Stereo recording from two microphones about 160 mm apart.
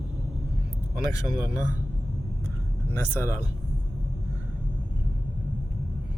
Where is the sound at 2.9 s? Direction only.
15° left (ahead or behind).